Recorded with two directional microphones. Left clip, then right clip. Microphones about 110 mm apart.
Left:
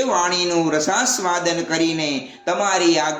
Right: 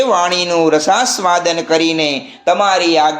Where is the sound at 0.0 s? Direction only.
45° right (ahead or behind).